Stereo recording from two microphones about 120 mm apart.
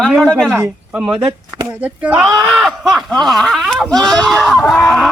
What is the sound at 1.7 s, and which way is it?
Speech, 15° right (ahead or behind).